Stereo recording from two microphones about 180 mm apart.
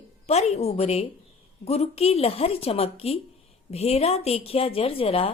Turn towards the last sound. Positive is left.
turn(degrees=30)  # may be behind; listen again after turning